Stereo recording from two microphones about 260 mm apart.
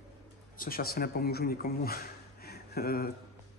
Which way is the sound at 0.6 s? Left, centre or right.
Left.